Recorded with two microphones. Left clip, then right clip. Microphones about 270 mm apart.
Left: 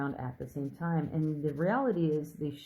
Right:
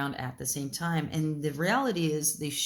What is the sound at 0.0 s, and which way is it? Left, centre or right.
Speech, right.